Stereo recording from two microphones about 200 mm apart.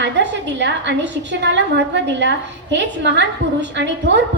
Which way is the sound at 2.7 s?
60° right (ahead or behind).